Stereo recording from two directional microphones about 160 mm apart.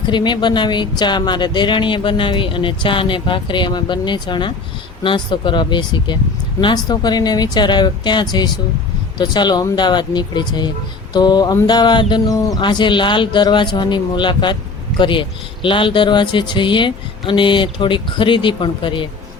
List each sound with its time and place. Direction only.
0.1 s speech: 30° left (ahead or behind)